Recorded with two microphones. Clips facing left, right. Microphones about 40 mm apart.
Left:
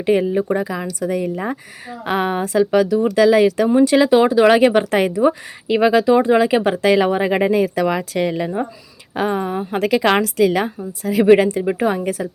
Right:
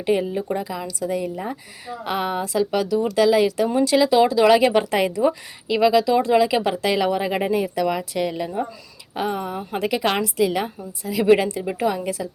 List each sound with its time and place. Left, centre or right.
0.0 s a woman's voice: left
4.1 s speech: left
7.6 s a woman's voice: left
9.1 s speech: left
9.7 s a woman's voice: left
11.3 s a woman's voice: left